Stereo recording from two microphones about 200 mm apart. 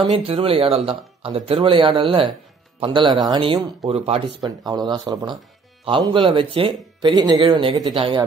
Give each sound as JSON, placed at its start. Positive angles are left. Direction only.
{"t": 0.1, "sound": "speech", "side_deg": -30}